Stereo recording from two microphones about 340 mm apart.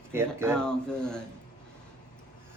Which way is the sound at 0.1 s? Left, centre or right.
Centre.